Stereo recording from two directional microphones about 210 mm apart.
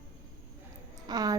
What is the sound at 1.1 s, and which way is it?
Speech, 20° right (ahead or behind).